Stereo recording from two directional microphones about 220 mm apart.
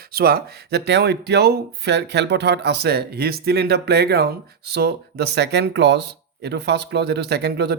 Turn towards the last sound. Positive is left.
turn(degrees=-50)  # may be behind; listen again after turning